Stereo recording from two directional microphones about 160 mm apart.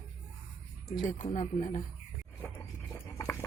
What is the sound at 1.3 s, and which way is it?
Speech, 45° left (ahead or behind).